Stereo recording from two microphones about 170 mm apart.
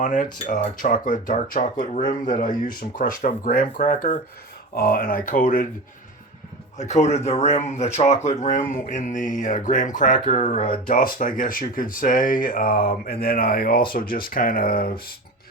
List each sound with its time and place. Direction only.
0.0 s speech: 50° left (ahead or behind)
6.7 s speech: 45° left (ahead or behind)
10.7 s speech: 55° left (ahead or behind)